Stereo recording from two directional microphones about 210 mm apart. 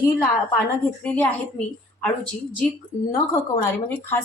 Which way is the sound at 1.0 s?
5° left (ahead or behind).